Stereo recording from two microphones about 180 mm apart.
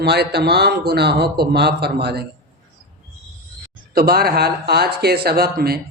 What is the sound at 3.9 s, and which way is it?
A man's voice, 55° right (ahead or behind).